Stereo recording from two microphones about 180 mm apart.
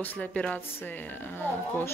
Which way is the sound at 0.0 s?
10° left (ahead or behind).